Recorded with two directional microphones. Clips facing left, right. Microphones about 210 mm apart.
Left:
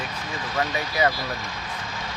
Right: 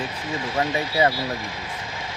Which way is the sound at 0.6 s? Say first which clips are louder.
Right 2 dB; 25° right (ahead or behind).